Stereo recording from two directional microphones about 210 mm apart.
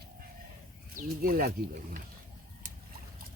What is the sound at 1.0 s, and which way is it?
Speech, 40° right (ahead or behind).